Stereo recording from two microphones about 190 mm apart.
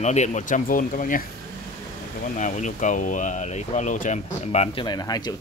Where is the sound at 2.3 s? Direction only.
40° left (ahead or behind).